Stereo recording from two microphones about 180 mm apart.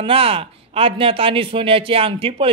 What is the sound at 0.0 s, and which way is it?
Speech, 30° right (ahead or behind).